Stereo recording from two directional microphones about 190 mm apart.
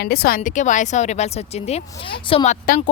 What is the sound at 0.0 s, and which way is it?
Speech, 55° left (ahead or behind).